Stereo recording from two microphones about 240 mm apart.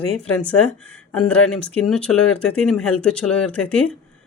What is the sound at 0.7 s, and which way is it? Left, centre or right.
Speech, centre.